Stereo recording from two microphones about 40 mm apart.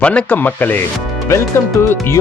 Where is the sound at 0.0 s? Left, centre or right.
Left.